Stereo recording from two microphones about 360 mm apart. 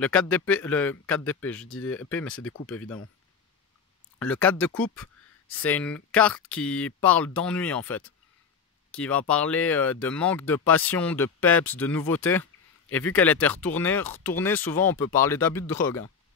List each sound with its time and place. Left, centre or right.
0.0 s speech: centre
2.3 s speech: left
2.7 s speech: centre
4.2 s speech: centre